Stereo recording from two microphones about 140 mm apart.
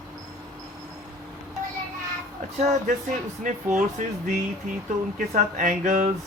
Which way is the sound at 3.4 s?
65° right (ahead or behind).